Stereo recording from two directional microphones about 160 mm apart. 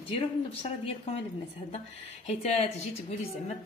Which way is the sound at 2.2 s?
45° left (ahead or behind).